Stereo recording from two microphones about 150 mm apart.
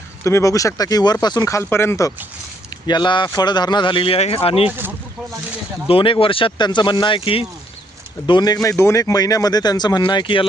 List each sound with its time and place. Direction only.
0.3 s speech: 20° left (ahead or behind)
2.8 s speech: 30° left (ahead or behind)
5.9 s speech: 35° left (ahead or behind)